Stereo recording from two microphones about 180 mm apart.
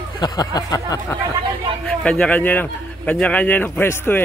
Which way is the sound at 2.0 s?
5° left (ahead or behind).